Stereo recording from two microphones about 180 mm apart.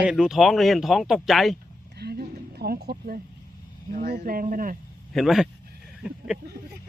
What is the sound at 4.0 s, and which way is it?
Speech, 55° right (ahead or behind).